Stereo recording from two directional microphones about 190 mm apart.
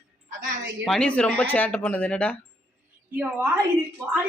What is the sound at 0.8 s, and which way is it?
Speech, 5° left (ahead or behind).